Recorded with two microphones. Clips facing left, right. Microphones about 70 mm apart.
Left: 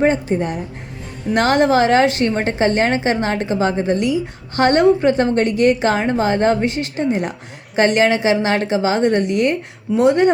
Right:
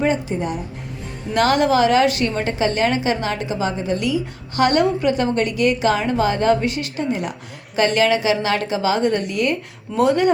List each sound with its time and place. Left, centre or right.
0.0 s a woman's voice: left
1.3 s a woman's voice: left
3.9 s a woman's voice: left